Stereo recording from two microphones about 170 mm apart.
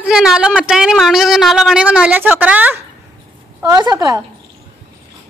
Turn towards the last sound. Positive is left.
turn(degrees=-20)  # may be behind; listen again after turning